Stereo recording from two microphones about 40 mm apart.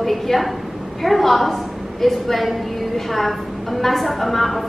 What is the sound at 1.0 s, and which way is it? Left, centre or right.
A woman's voice, centre.